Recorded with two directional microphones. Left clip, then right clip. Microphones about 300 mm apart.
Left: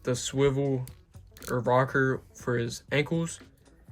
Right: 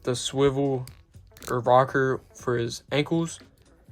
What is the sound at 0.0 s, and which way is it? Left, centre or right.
Speech, centre.